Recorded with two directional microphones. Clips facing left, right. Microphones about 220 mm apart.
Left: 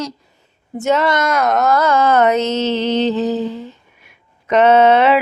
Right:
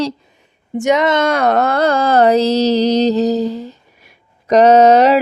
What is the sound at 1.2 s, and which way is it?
Mantra, 30° right (ahead or behind).